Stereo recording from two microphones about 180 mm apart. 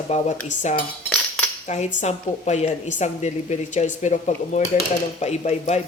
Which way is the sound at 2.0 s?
40° left (ahead or behind).